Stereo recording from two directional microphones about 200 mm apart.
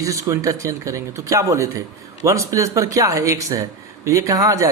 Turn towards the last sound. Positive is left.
turn(degrees=-15)  # may be behind; listen again after turning